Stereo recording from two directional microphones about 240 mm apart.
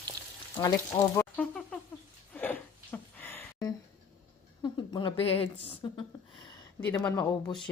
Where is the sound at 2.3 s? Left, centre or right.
Centre.